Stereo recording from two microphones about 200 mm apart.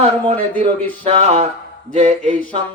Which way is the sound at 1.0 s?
30° right (ahead or behind).